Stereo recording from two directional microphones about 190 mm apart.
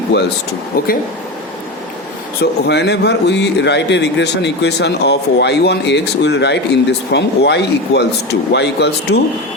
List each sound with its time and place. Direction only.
2.4 s a man's voice: 60° left (ahead or behind)